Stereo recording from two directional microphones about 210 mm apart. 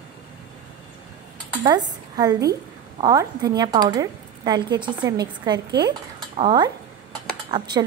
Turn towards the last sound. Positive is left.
turn(degrees=-20)  # may be behind; listen again after turning